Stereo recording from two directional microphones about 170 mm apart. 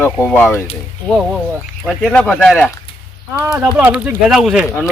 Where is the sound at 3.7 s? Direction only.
10° right (ahead or behind).